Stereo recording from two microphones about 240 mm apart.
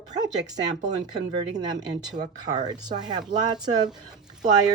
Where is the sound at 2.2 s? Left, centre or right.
Centre.